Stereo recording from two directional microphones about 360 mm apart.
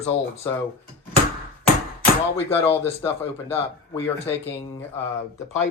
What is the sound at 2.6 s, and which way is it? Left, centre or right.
Speech, centre.